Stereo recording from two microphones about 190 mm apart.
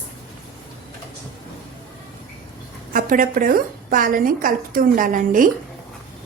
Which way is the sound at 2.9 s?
45° right (ahead or behind).